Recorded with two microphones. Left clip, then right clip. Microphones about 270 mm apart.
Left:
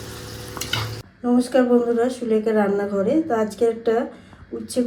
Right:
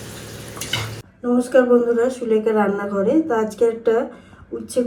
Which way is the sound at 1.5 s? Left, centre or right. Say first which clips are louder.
Right 4 dB; centre.